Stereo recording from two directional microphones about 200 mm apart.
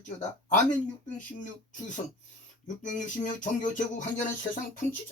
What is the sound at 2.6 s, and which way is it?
Speech, 40° left (ahead or behind).